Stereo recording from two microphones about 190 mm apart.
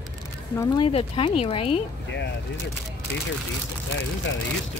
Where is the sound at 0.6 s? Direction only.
25° left (ahead or behind).